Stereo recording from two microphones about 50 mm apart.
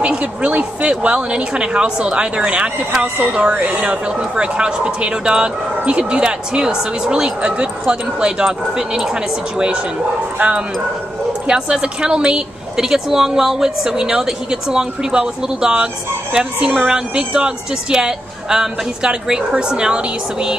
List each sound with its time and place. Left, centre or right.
0.0 s a woman's voice: right
10.4 s speech: right
11.4 s a woman's voice: centre